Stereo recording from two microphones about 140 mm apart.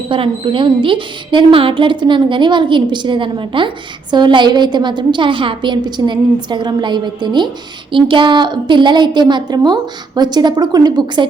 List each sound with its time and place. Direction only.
0.1 s a woman's voice: 40° right (ahead or behind)